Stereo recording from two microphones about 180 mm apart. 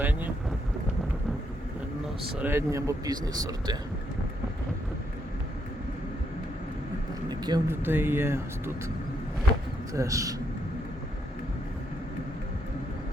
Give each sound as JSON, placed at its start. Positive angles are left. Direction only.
{"t": 0.0, "sound": "boat", "side_deg": -10}
{"t": 2.4, "sound": "speech", "side_deg": -15}
{"t": 7.3, "sound": "speech", "side_deg": -25}
{"t": 7.8, "sound": "speech", "side_deg": -10}
{"t": 9.9, "sound": "speech", "side_deg": -15}